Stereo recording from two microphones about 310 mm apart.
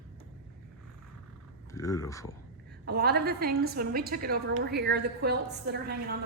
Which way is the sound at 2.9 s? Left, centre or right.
Right.